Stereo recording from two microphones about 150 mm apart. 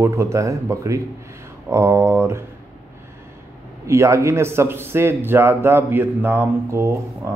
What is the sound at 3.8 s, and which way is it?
A man's voice, 20° right (ahead or behind).